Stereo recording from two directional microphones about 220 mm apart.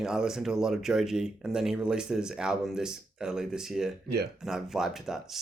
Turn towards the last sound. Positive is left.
turn(degrees=0)  # may be behind; listen again after turning